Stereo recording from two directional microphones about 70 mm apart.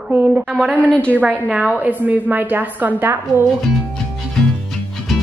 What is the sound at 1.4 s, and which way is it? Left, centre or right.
A woman's voice, right.